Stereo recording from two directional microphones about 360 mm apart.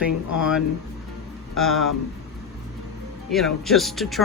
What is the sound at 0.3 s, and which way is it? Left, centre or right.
Speech, centre.